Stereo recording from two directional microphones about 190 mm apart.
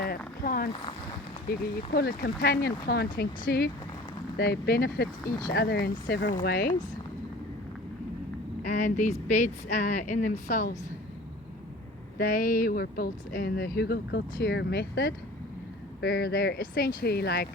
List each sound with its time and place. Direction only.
0.0 s a sound: 50° left (ahead or behind)
1.5 s speech: 50° left (ahead or behind)
8.6 s a woman's voice: 40° left (ahead or behind)
12.3 s speech: 45° left (ahead or behind)